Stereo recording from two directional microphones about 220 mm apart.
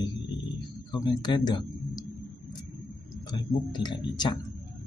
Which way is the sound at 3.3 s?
20° left (ahead or behind).